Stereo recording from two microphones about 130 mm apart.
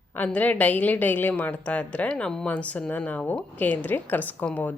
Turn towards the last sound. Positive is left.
turn(degrees=10)  # may be behind; listen again after turning